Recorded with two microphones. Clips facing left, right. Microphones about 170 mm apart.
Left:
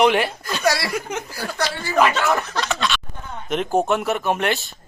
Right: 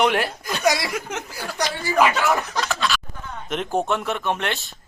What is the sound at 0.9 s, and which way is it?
Speech, centre (ahead or behind).